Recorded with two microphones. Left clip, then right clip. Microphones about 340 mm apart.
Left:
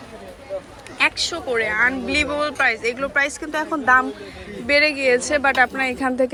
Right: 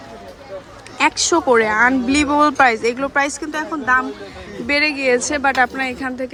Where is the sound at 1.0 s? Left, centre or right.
Centre.